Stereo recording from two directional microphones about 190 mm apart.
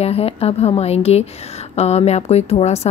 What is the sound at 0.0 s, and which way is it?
Speech, 30° left (ahead or behind).